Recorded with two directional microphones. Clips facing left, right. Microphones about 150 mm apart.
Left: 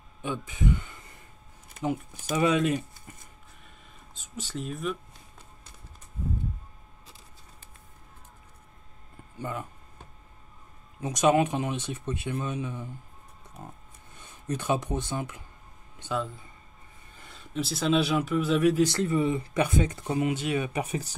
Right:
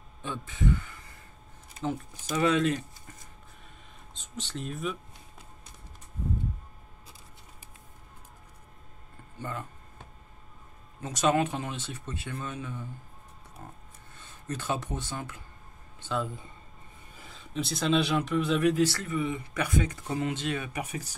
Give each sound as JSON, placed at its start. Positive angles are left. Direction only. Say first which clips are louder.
{"t": 0.2, "sound": "speech", "louder": "left 1 dB", "side_deg": 15}
{"t": 4.1, "sound": "speech", "louder": "left 1 dB", "side_deg": 5}
{"t": 9.4, "sound": "speech", "louder": "left 3 dB", "side_deg": 10}
{"t": 11.0, "sound": "speech", "louder": "left 3 dB", "side_deg": 15}
{"t": 17.2, "sound": "speech", "louder": "left 2 dB", "side_deg": 0}
{"t": 18.8, "sound": "speech", "louder": "left 3 dB", "side_deg": 20}
{"t": 20.2, "sound": "speech", "louder": "left 4 dB", "side_deg": 10}
{"t": 20.7, "sound": "speech", "louder": "left 5 dB", "side_deg": 25}